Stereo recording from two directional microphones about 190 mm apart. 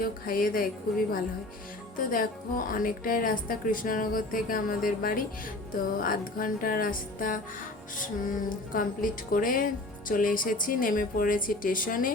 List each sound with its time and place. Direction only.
0.0 s speech: 50° left (ahead or behind)
2.0 s speech: 45° left (ahead or behind)